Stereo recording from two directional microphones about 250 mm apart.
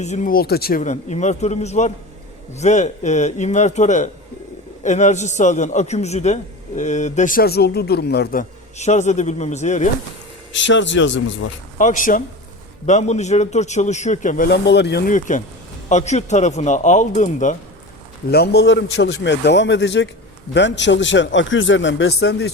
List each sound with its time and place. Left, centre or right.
0.0 s a man's voice: left
10.5 s a man's voice: left
11.8 s a man's voice: left
18.3 s a man's voice: left